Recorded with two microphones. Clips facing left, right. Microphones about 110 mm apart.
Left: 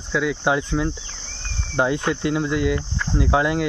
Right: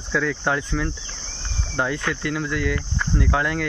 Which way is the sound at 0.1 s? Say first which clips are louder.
Left 2 dB; 10° left (ahead or behind).